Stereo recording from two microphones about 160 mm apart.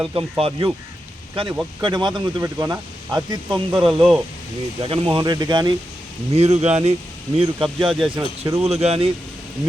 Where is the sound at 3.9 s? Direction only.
Centre (ahead or behind).